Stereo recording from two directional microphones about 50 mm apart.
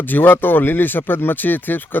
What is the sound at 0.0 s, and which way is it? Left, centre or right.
Speech, left.